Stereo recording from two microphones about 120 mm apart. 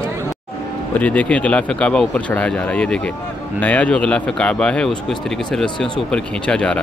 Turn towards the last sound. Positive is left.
turn(degrees=10)  # may be behind; listen again after turning